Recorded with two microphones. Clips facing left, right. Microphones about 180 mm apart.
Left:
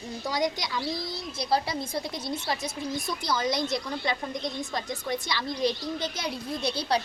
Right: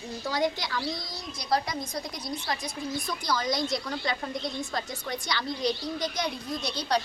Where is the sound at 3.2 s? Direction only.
25° left (ahead or behind).